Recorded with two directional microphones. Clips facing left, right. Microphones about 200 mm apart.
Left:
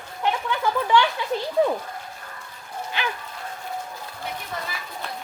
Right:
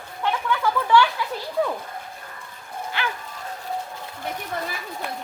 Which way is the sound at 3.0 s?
15° left (ahead or behind).